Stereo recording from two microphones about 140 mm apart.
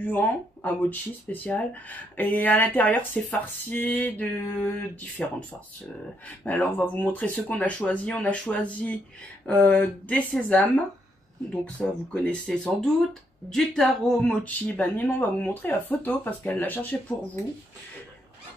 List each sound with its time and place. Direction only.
0.0 s speech: 15° left (ahead or behind)
6.4 s speech: 10° left (ahead or behind)